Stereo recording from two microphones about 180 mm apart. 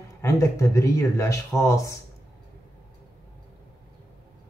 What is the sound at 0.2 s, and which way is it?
Speech, 15° left (ahead or behind).